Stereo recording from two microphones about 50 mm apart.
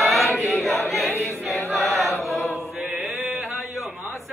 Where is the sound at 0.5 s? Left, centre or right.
Centre.